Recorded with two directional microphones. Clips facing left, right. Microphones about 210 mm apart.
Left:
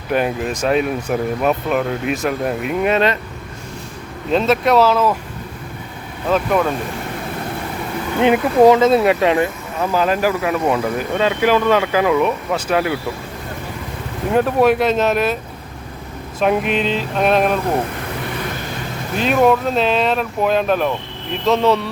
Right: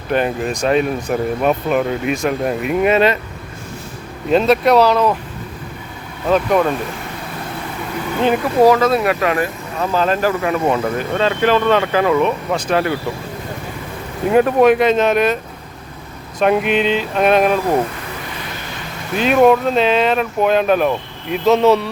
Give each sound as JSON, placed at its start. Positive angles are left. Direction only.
{"t": 0.1, "sound": "speech", "side_deg": 5}
{"t": 4.3, "sound": "speech", "side_deg": 0}
{"t": 6.3, "sound": "speech", "side_deg": 0}
{"t": 8.2, "sound": "speech", "side_deg": 20}
{"t": 9.8, "sound": "speech", "side_deg": 10}
{"t": 14.3, "sound": "speech", "side_deg": 0}
{"t": 16.4, "sound": "speech", "side_deg": 0}
{"t": 19.1, "sound": "speech", "side_deg": -5}